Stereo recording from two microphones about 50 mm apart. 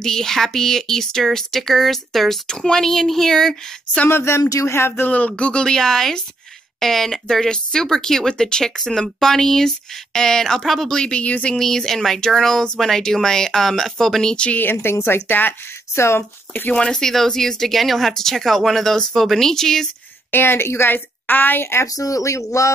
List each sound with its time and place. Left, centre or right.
0.0 s speech: centre
4.1 s speech: left
5.0 s a woman's voice: left
5.3 s speech: centre
11.0 s speech: left
11.5 s speech: centre
14.3 s speech: left
14.6 s a woman's voice: left
15.9 s speech: left
16.7 s speech: centre
20.2 s a woman's voice: left
20.9 s a woman's voice: left
22.2 s speech: left